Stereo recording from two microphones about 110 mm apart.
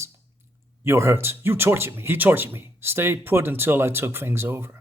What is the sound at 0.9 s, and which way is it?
Speech, 25° right (ahead or behind).